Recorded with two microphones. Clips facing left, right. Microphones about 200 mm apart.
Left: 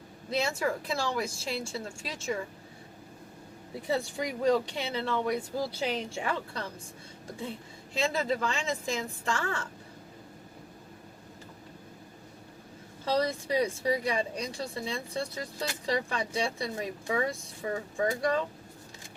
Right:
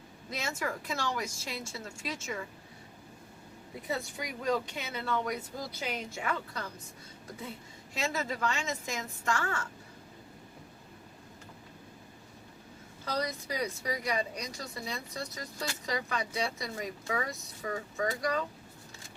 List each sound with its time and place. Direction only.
0.3 s speech: 30° left (ahead or behind)
3.8 s speech: 30° left (ahead or behind)
7.9 s speech: 30° left (ahead or behind)
13.1 s speech: 30° left (ahead or behind)